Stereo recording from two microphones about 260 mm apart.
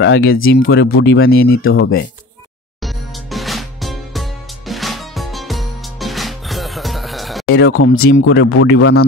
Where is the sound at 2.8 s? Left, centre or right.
Centre.